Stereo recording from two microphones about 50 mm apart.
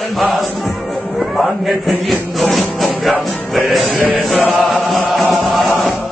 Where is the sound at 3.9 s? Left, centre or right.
Left.